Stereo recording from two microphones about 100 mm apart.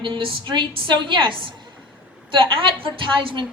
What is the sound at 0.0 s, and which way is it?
A woman's voice, 55° right (ahead or behind).